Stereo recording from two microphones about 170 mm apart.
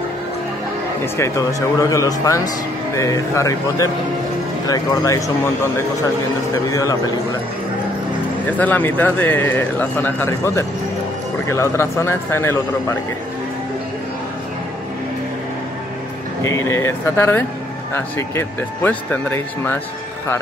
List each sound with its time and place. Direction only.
1.0 s speech: 15° left (ahead or behind)
6.7 s speech: 20° left (ahead or behind)
8.5 s speech: 10° left (ahead or behind)
16.4 s speech: 15° left (ahead or behind)